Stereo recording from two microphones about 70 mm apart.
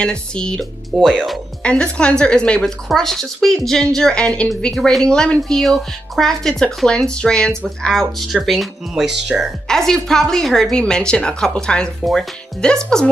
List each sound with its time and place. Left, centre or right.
0.0 s speech: centre
0.9 s speech: centre
1.6 s speech: centre
9.7 s speech: centre